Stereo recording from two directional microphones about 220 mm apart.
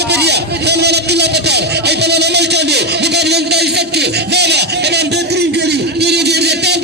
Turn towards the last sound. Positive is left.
turn(degrees=-50)  # may be behind; listen again after turning